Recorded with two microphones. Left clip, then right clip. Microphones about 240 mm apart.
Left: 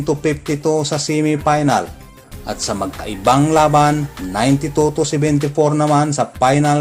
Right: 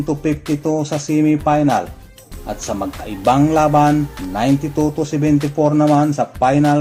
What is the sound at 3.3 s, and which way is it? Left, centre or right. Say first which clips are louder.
Speech: left 1 dB; left.